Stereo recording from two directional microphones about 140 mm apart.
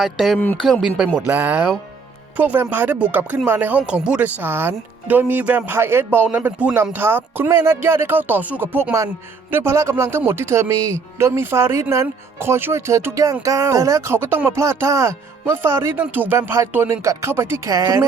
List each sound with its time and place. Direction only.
0.0 s speech: centre (ahead or behind)
0.3 s speech: 15° left (ahead or behind)
0.6 s speech: centre (ahead or behind); by 18.0 s 25° right (ahead or behind)